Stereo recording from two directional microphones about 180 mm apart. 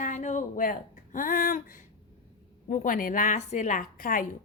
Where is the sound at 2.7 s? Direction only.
50° left (ahead or behind).